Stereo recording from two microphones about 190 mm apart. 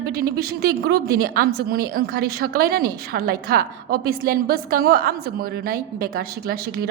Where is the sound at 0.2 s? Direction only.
55° right (ahead or behind).